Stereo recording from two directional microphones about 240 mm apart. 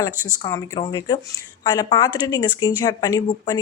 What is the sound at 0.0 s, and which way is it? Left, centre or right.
Speech, centre.